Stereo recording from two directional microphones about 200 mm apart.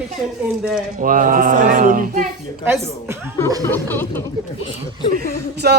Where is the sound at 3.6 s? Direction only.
10° left (ahead or behind).